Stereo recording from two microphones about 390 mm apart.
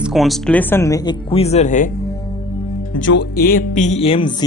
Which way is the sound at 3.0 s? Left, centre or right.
Left.